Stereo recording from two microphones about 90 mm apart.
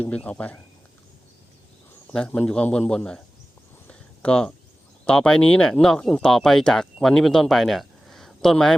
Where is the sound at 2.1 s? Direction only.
10° left (ahead or behind).